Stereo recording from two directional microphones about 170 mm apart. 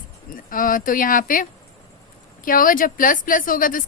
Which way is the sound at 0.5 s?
55° left (ahead or behind).